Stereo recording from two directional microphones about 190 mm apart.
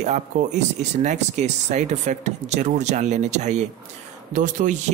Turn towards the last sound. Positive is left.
turn(degrees=-40)  # may be behind; listen again after turning